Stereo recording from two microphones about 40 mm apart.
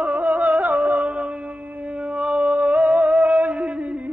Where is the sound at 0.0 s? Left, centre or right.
Right.